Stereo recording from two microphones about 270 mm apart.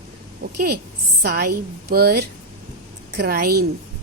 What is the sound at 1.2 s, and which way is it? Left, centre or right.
A woman's voice, right.